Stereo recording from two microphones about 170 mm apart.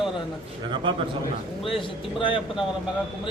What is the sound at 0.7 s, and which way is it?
Speech, 30° right (ahead or behind).